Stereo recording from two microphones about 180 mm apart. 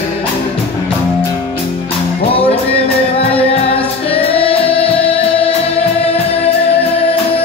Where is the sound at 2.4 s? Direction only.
30° left (ahead or behind).